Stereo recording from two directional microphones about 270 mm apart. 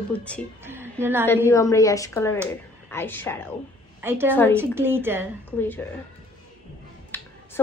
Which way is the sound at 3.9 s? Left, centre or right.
Centre.